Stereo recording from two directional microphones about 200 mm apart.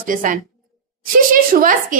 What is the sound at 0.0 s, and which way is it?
Speech, 45° right (ahead or behind).